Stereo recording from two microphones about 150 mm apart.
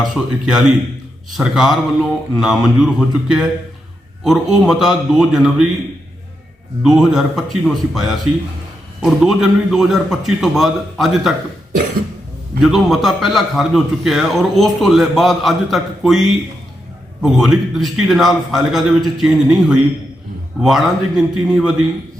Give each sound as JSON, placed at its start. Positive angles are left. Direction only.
{"t": 0.0, "sound": "a man's voice", "side_deg": -5}
{"t": 6.8, "sound": "a man's voice", "side_deg": -5}
{"t": 12.6, "sound": "a man's voice", "side_deg": 0}
{"t": 17.2, "sound": "a man's voice", "side_deg": 0}